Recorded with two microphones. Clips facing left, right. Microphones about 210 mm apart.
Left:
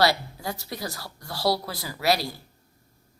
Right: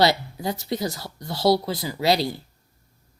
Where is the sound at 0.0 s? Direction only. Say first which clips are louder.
Right 3 dB; 20° right (ahead or behind).